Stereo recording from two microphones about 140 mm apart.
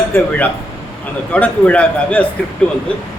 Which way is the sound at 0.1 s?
15° left (ahead or behind).